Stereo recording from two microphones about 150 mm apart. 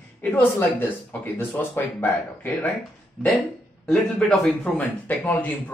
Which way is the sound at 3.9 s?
Centre (ahead or behind).